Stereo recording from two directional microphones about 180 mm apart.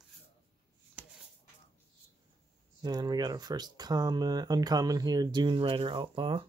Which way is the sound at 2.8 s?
20° right (ahead or behind).